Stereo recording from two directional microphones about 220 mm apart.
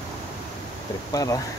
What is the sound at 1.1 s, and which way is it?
Speech, 15° left (ahead or behind).